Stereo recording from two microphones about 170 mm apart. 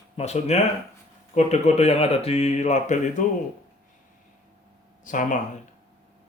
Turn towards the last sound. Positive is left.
turn(degrees=50)  # may be behind; listen again after turning